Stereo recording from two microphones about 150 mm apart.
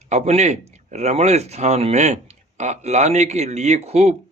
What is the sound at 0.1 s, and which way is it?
Speech, 45° right (ahead or behind).